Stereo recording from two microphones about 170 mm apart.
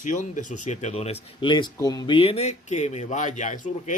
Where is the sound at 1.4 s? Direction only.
30° left (ahead or behind).